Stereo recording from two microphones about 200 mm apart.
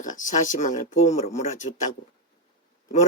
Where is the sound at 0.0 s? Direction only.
40° left (ahead or behind).